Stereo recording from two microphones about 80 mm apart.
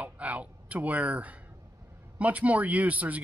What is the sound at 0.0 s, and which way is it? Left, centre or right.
A man's voice, centre.